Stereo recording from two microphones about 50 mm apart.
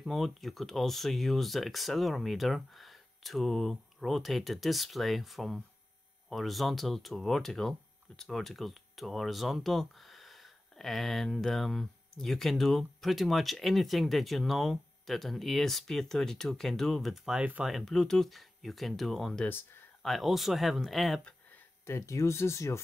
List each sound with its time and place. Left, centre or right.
0.0 s speech: centre
17.9 s speech: centre
21.8 s speech: left